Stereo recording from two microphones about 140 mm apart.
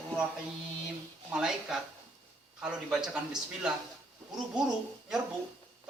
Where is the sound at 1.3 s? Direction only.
5° right (ahead or behind).